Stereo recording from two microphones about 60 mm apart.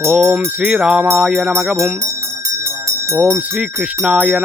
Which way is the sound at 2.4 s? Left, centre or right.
Right.